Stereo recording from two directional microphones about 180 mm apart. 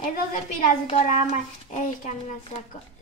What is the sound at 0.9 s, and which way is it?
Speech, 35° left (ahead or behind).